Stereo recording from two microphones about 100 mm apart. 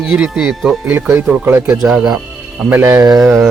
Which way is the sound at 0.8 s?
20° right (ahead or behind).